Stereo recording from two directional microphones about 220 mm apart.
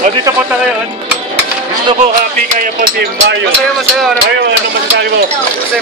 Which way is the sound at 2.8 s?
45° right (ahead or behind).